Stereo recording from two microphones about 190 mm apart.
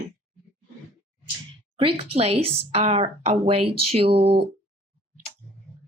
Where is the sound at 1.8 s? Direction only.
30° right (ahead or behind).